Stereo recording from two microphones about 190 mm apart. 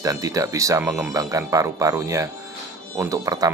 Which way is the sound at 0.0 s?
20° right (ahead or behind).